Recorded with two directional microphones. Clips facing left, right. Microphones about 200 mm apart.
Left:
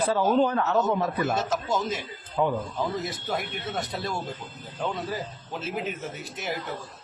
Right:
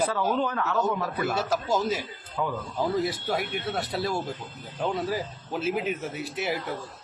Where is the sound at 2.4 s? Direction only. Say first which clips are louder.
Left 5 dB; 25° left (ahead or behind).